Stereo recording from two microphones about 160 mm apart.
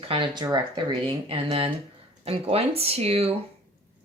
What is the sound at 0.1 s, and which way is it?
Speech, 30° right (ahead or behind).